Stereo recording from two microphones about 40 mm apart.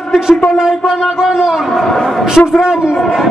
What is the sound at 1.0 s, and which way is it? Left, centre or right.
Speech, centre.